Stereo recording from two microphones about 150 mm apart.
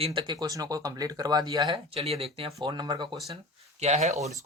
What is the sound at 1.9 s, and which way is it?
Speech, 40° right (ahead or behind).